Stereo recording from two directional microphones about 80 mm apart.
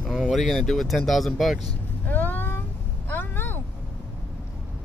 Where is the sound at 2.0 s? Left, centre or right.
Left.